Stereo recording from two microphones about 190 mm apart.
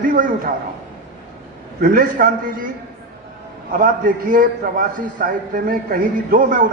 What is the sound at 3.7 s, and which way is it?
A man's voice, 45° right (ahead or behind).